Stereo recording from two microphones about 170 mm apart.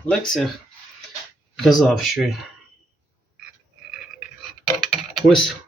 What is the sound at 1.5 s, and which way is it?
Speech, centre (ahead or behind).